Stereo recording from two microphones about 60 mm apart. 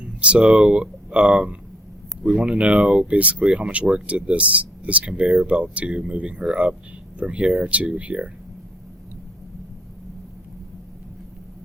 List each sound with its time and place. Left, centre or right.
0.0 s speech: centre